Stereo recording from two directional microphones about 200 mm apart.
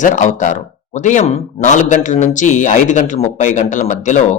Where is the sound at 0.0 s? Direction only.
40° left (ahead or behind).